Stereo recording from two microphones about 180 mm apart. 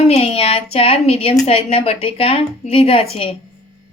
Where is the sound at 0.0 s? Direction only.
35° left (ahead or behind).